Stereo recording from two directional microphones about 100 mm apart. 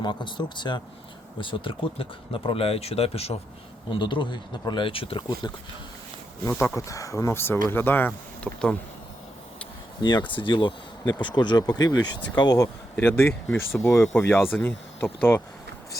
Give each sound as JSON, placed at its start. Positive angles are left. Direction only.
{"t": 0.0, "sound": "speech", "side_deg": 50}
{"t": 3.8, "sound": "speech", "side_deg": 55}
{"t": 5.4, "sound": "speech", "side_deg": 45}
{"t": 6.7, "sound": "speech", "side_deg": 30}
{"t": 10.0, "sound": "speech", "side_deg": 45}
{"t": 12.5, "sound": "speech", "side_deg": 30}